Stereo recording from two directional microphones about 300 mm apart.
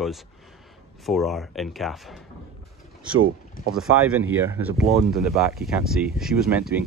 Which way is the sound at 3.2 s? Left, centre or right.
Right.